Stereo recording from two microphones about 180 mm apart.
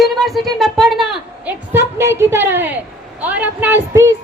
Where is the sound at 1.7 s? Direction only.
15° right (ahead or behind).